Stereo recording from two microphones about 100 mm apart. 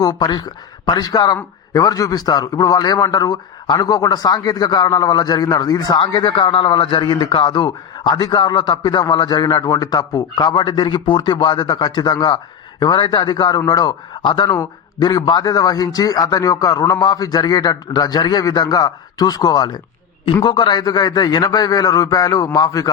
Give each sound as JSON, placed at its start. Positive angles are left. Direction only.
{"t": 0.0, "sound": "a man's voice", "side_deg": 40}